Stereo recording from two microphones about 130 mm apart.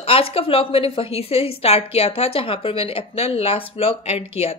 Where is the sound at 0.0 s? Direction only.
45° left (ahead or behind).